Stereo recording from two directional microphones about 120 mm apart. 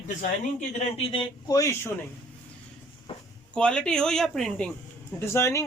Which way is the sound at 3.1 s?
45° left (ahead or behind).